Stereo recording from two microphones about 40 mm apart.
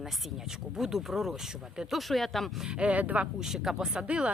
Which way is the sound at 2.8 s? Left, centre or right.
Right.